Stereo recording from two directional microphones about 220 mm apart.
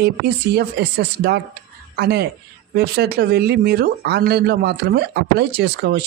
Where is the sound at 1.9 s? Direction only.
45° right (ahead or behind).